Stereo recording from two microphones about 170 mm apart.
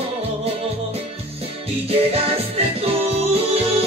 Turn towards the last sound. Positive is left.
turn(degrees=-35)  # may be behind; listen again after turning